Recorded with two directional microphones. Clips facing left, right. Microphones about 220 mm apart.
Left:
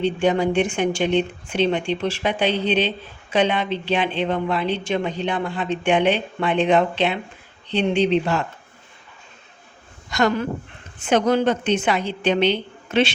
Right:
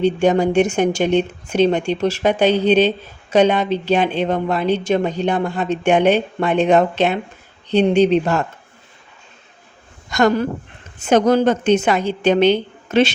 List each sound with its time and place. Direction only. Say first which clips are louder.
0.0 s a woman's voice: right 4 dB; 45° right (ahead or behind)
10.1 s a woman's voice: right 4 dB; 45° right (ahead or behind)